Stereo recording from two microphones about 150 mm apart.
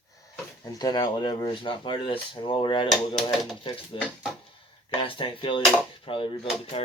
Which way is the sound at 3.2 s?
Centre (ahead or behind).